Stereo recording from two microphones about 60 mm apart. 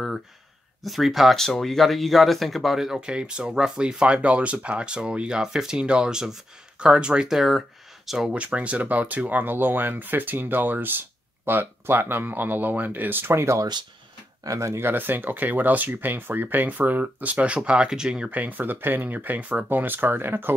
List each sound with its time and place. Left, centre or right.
0.8 s speech: centre
8.3 s speech: right
14.4 s speech: right
14.8 s speech: right; by 18.3 s centre
18.3 s speech: right